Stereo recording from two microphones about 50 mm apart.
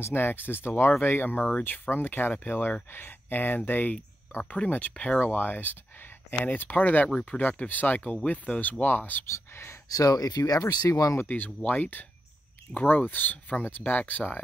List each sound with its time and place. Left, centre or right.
0.0 s speech: left
9.3 s speech: left
10.6 s speech: left
11.2 s speech: left